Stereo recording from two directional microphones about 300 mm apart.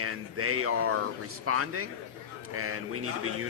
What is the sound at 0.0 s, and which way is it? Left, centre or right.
Speech, right.